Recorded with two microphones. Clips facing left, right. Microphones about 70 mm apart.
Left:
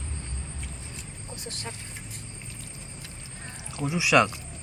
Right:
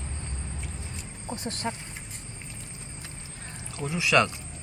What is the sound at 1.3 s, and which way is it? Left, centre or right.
Speech, right.